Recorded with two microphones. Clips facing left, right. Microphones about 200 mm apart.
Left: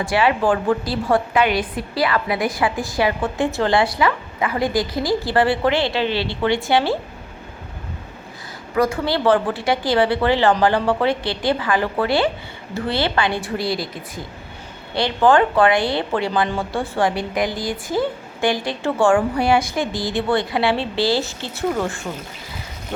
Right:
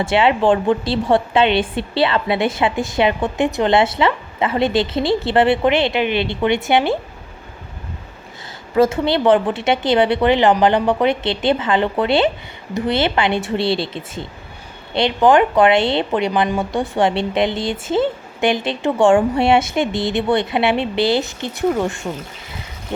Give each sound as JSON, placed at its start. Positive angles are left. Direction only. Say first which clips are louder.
{"t": 0.0, "sound": "a woman's voice", "louder": "right 3 dB", "side_deg": -25}
{"t": 8.7, "sound": "a woman's voice", "louder": "right 4 dB", "side_deg": -25}